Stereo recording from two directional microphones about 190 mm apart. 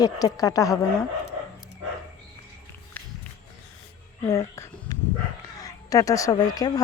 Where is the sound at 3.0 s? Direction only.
10° left (ahead or behind).